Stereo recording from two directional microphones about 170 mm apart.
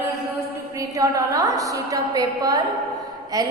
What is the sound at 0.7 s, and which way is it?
A woman's voice, 20° right (ahead or behind).